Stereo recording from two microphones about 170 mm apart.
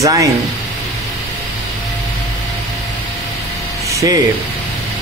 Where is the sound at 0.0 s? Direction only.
20° right (ahead or behind).